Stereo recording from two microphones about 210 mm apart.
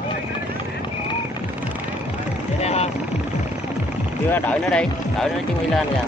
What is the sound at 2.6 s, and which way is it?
Vehicle, 30° left (ahead or behind).